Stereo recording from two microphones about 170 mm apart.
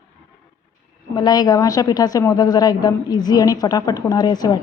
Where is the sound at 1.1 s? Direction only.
25° left (ahead or behind).